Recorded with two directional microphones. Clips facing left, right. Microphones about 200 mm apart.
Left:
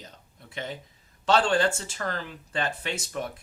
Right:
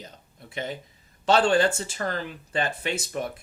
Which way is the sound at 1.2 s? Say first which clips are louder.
Right 2 dB; 15° right (ahead or behind).